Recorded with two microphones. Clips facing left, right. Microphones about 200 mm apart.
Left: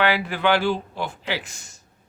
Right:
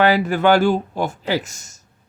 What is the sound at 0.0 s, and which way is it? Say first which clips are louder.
Speech: right 6 dB; 40° right (ahead or behind).